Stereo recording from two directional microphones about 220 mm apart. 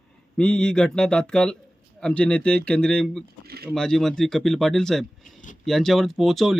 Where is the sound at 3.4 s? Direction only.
45° right (ahead or behind).